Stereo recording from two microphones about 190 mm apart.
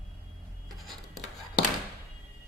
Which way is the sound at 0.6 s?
Centre (ahead or behind).